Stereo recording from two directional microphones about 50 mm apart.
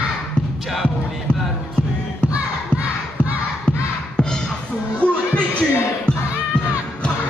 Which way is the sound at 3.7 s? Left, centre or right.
Centre.